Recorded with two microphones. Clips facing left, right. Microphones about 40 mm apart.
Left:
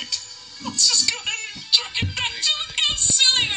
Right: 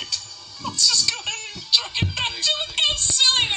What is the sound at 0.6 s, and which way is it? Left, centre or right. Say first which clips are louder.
Music: even; left.